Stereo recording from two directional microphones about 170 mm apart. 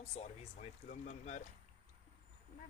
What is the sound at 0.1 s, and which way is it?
A man's voice, 40° left (ahead or behind).